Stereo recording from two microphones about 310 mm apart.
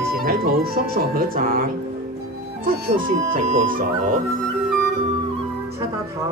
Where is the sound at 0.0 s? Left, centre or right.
Right.